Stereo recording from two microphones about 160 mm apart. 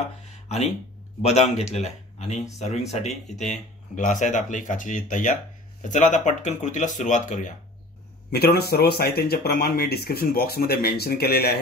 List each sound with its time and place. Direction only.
0.3 s a sound: 40° left (ahead or behind)
1.2 s speech: 40° left (ahead or behind)
8.3 s speech: 75° left (ahead or behind)